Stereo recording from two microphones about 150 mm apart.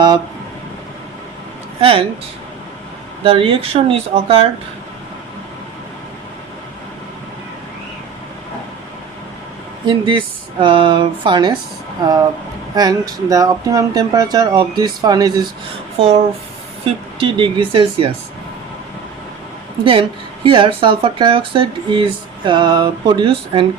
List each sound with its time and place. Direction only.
1.8 s speech: 40° right (ahead or behind)
3.2 s speech: 35° right (ahead or behind)
9.8 s speech: 35° right (ahead or behind)
12.7 s speech: 25° right (ahead or behind)
16.0 s speech: 40° right (ahead or behind)
19.8 s speech: 35° right (ahead or behind)